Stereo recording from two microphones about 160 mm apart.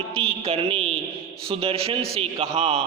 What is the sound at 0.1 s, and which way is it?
A man's voice, 35° right (ahead or behind).